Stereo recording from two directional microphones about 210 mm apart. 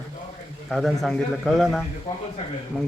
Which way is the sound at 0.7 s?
Centre (ahead or behind).